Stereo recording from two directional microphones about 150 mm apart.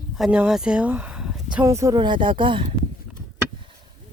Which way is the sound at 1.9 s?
30° right (ahead or behind).